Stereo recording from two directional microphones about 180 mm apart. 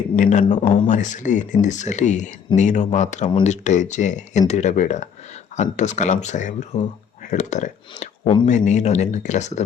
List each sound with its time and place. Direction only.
0.2 s speech: 45° left (ahead or behind)